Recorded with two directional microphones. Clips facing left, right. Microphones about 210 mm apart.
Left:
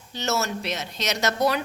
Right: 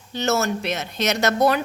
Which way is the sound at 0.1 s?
55° right (ahead or behind).